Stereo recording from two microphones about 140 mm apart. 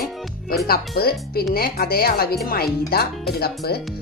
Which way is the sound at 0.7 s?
90° left.